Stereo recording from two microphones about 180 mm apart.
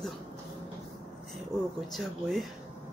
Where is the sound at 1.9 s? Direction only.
Centre (ahead or behind).